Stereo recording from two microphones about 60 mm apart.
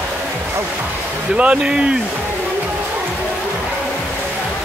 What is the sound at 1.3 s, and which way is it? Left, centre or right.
Speech, centre.